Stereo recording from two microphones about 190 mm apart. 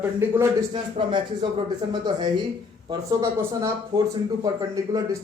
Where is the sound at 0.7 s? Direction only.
25° right (ahead or behind).